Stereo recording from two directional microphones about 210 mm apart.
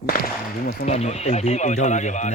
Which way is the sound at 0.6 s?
35° left (ahead or behind).